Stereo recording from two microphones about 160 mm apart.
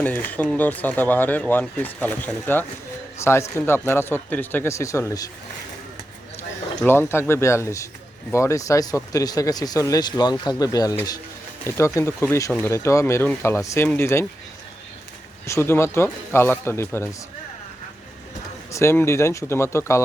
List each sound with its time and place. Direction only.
0.0 s speech: 10° left (ahead or behind)
6.8 s speech: 15° left (ahead or behind)
15.4 s speech: 15° left (ahead or behind)
18.7 s speech: 15° left (ahead or behind)